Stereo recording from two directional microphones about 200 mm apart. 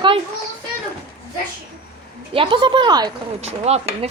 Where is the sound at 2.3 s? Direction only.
25° right (ahead or behind).